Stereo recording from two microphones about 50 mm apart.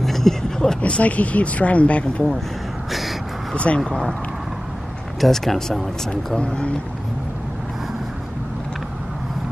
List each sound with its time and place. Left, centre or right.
0.0 s a sound: centre
0.7 s speech: left
2.9 s gasp: centre
3.5 s speech: left
5.2 s speech: centre
6.3 s speech: left